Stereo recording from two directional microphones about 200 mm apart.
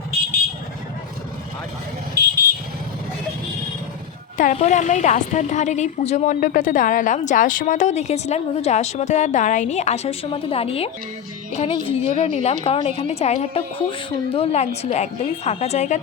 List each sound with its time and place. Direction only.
4.4 s a woman's voice: 40° left (ahead or behind)